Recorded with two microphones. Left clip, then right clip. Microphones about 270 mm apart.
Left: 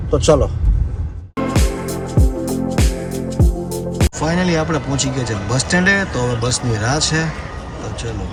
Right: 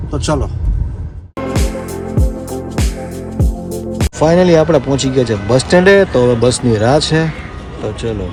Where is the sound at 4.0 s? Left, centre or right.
Centre.